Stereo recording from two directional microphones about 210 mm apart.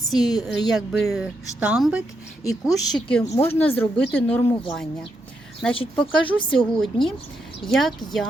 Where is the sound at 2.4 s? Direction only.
15° left (ahead or behind).